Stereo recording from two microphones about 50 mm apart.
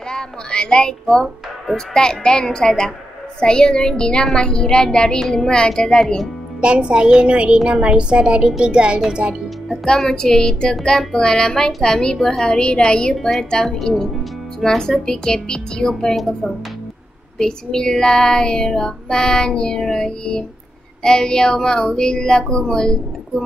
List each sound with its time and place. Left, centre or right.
0.1 s child singing: centre
1.0 s a child's voice: centre
2.0 s child singing: centre
6.6 s speech: right
9.7 s child singing: centre
12.2 s a woman's voice: centre
12.5 s child singing: centre
13.1 s child singing: centre